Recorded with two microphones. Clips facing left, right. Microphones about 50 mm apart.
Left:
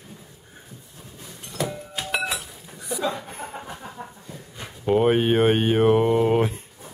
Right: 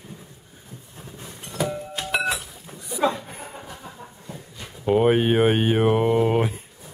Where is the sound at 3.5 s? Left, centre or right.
Left.